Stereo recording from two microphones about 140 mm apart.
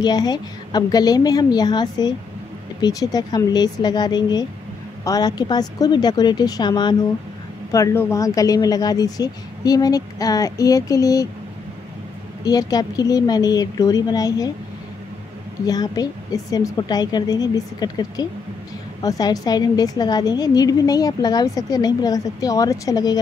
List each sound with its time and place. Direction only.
0.0 s a woman's voice: 30° left (ahead or behind)
7.7 s a woman's voice: 20° left (ahead or behind)
12.4 s a woman's voice: 25° left (ahead or behind)
15.6 s a woman's voice: 30° left (ahead or behind)